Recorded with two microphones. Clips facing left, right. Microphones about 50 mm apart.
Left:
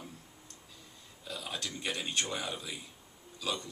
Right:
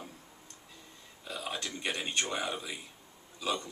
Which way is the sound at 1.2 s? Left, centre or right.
Right.